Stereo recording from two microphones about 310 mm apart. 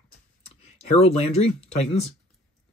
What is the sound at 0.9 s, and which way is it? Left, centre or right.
Speech, centre.